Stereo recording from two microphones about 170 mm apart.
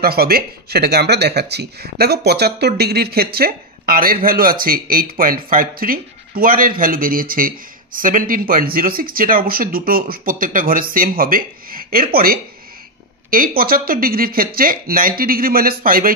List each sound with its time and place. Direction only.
0.0 s speech: 65° right (ahead or behind)
13.6 s speech: 60° right (ahead or behind)